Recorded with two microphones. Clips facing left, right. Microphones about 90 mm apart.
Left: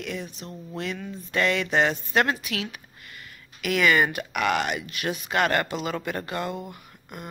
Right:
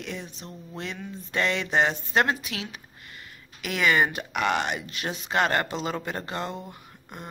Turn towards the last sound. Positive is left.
turn(degrees=-25)  # may be behind; listen again after turning